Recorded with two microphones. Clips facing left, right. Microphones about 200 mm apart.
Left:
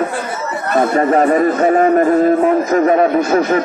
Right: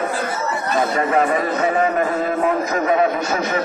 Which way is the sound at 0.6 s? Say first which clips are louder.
Left 7 dB; 55° left (ahead or behind).